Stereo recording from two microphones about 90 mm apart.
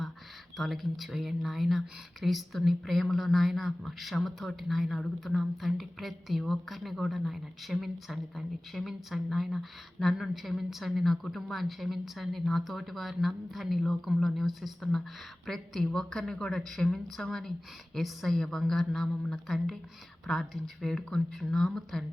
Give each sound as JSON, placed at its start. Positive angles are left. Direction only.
{"t": 0.5, "sound": "a woman's voice", "side_deg": 0}